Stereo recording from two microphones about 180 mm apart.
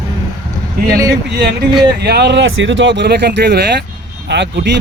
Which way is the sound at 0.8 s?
20° right (ahead or behind).